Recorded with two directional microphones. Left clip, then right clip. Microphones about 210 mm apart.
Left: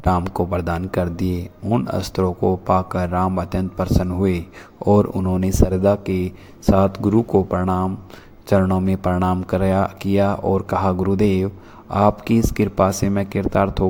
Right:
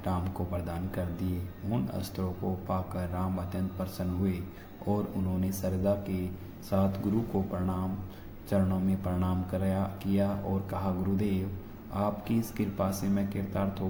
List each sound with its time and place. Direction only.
0.0 s speech: 45° left (ahead or behind)